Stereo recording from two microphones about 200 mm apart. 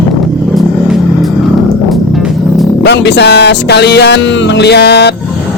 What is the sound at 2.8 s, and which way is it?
Speech, 60° left (ahead or behind).